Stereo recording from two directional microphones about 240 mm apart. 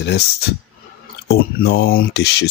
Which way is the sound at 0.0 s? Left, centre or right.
Left.